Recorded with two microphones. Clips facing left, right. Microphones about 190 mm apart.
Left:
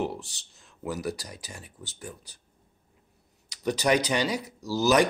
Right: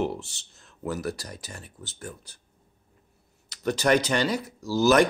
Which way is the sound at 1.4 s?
15° left (ahead or behind).